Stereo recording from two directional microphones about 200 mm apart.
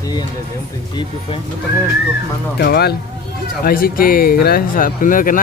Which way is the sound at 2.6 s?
50° left (ahead or behind).